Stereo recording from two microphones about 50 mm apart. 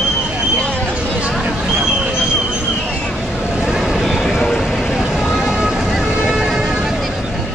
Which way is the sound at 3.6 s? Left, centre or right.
Centre.